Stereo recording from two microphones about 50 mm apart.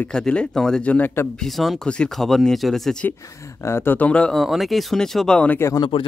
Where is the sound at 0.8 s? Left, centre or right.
Left.